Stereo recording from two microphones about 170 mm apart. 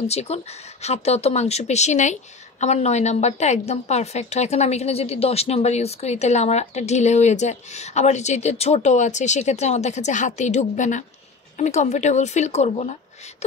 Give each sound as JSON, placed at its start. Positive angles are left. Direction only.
{"t": 0.0, "sound": "a woman's voice", "side_deg": 40}